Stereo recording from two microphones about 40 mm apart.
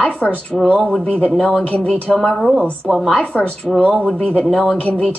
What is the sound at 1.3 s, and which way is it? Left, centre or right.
Speech, centre.